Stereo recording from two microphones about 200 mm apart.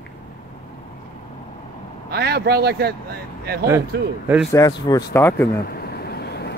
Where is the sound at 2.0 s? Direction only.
55° right (ahead or behind).